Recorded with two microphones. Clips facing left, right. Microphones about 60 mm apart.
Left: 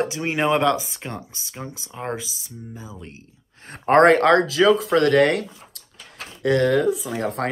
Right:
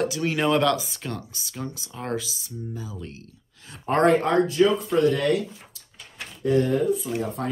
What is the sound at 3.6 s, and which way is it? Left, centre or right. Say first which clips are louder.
Speech: left 6 dB; left.